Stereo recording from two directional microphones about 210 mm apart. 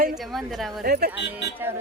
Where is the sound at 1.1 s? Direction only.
10° right (ahead or behind).